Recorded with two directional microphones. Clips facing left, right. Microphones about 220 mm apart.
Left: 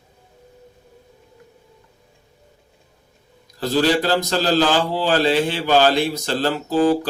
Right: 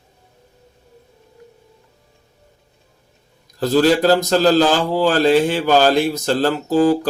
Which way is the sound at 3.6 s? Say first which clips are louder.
Right 4 dB; 45° right (ahead or behind).